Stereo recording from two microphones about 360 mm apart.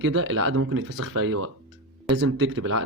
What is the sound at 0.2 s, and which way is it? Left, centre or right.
A man's voice, right.